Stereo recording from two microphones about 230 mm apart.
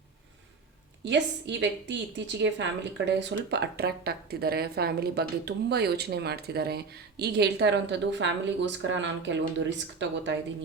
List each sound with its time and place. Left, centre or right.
1.0 s speech: right